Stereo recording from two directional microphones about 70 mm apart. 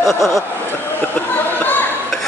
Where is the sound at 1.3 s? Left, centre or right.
Left.